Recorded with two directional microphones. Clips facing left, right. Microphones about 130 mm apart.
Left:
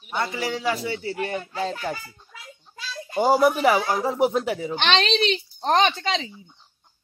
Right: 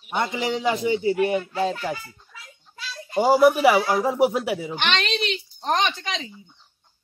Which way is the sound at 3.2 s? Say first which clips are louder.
Right 2 dB; 5° right (ahead or behind).